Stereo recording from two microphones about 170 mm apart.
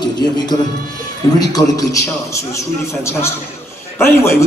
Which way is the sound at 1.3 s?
20° left (ahead or behind).